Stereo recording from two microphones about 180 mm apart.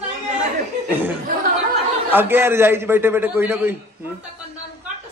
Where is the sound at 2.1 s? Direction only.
10° right (ahead or behind).